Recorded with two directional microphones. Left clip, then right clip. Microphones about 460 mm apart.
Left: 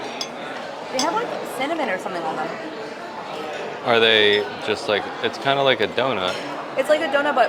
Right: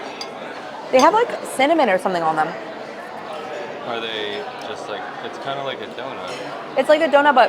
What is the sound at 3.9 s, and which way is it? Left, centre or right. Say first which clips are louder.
Speech: left 12 dB; left.